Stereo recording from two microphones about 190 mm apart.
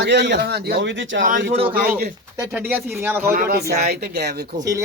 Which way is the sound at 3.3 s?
50° right (ahead or behind).